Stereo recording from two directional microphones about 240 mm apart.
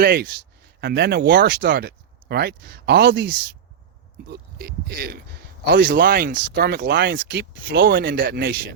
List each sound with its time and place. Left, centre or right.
0.0 s speech: right